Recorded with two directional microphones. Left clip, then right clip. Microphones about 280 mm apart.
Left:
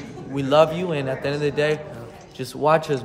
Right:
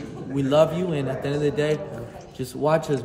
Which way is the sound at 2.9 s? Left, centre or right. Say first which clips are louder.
Left 1 dB; left.